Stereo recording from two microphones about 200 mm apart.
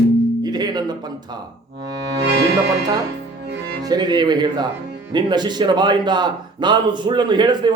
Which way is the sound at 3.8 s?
20° right (ahead or behind).